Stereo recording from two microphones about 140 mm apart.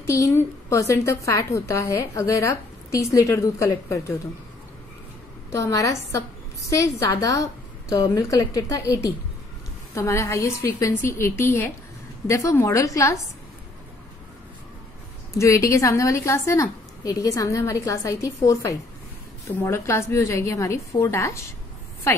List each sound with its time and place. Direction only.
0.0 s a woman's voice: 20° left (ahead or behind)
5.5 s a woman's voice: 20° left (ahead or behind)
15.3 s a woman's voice: 20° left (ahead or behind)